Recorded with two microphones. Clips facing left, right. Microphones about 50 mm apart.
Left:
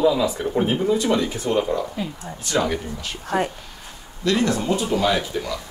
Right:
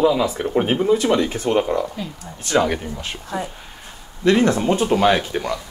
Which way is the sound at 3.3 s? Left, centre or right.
Left.